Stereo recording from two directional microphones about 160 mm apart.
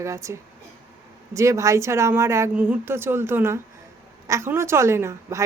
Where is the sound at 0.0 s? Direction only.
20° right (ahead or behind).